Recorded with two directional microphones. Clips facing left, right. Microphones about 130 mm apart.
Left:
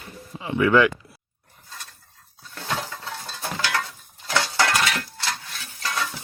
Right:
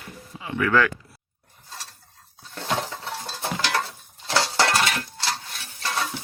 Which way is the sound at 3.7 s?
30° right (ahead or behind).